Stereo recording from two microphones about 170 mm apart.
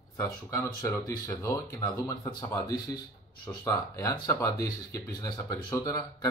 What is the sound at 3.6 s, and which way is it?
Speech, 20° left (ahead or behind).